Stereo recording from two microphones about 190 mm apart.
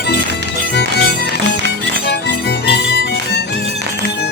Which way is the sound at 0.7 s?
60° left (ahead or behind).